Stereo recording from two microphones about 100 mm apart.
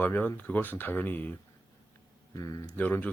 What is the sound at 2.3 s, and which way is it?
Speech, 35° left (ahead or behind).